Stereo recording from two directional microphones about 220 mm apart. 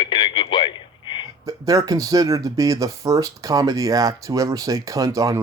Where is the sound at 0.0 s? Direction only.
25° left (ahead or behind).